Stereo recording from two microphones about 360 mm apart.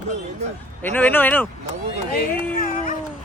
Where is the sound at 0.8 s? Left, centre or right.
Centre.